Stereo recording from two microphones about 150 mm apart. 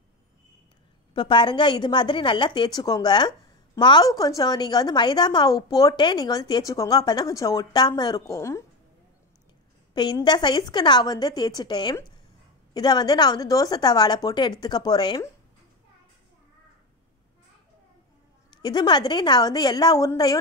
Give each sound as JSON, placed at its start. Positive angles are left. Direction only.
{"t": 1.1, "sound": "a woman's voice", "side_deg": 30}
{"t": 9.9, "sound": "a woman's voice", "side_deg": 30}
{"t": 18.6, "sound": "a woman's voice", "side_deg": 30}